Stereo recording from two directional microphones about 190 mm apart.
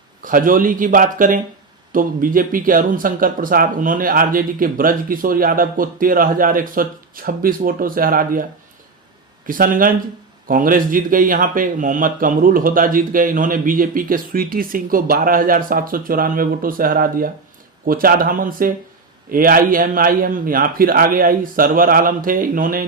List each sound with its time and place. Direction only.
0.2 s a man's voice: 45° right (ahead or behind)
9.5 s a man's voice: 45° right (ahead or behind)